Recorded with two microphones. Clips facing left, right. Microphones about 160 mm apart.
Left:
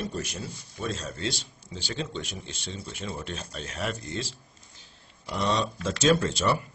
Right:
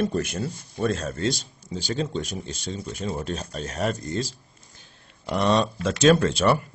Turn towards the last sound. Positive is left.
turn(degrees=-60)  # may be behind; listen again after turning